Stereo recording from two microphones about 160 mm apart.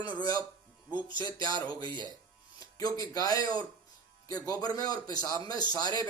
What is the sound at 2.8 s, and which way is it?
Speech, 25° left (ahead or behind).